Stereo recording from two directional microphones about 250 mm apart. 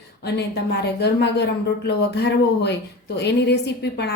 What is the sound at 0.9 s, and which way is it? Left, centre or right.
Speech, left.